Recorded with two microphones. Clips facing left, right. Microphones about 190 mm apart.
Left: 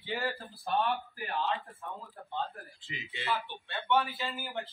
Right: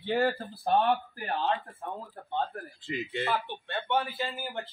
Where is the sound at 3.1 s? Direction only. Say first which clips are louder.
Right 2 dB; 50° right (ahead or behind).